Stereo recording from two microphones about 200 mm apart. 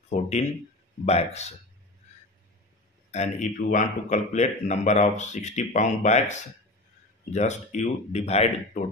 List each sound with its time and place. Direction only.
0.1 s speech: 35° left (ahead or behind)
3.1 s speech: 35° left (ahead or behind)
7.3 s speech: 35° left (ahead or behind)